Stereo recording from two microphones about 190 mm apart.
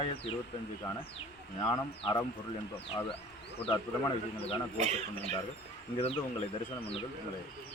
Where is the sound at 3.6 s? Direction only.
30° left (ahead or behind).